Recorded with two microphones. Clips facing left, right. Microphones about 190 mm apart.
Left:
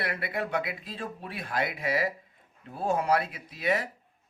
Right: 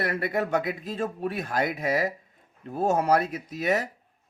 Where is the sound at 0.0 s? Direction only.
45° right (ahead or behind).